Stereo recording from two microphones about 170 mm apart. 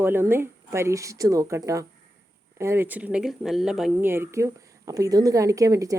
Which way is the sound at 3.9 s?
15° right (ahead or behind).